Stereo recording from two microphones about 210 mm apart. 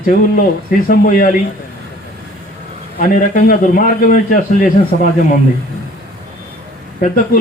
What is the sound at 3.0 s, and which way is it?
A man's voice, 40° left (ahead or behind).